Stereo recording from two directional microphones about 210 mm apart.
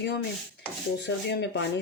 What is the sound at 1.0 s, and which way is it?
Speech, 55° left (ahead or behind).